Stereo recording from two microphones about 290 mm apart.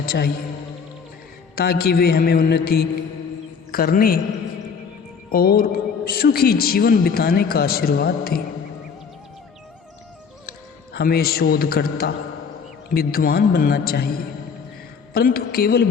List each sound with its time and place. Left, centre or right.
0.0 s a man's voice: left
1.5 s a man's voice: left
5.3 s a man's voice: left
10.9 s a man's voice: left
15.1 s a man's voice: left